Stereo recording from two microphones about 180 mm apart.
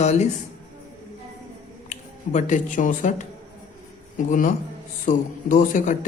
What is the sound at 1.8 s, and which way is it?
Speech, 40° left (ahead or behind).